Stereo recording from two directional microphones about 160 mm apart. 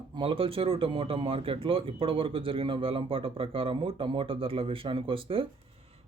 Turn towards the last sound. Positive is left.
turn(degrees=-35)  # may be behind; listen again after turning